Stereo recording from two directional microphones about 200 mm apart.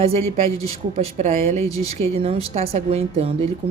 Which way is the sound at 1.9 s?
30° right (ahead or behind).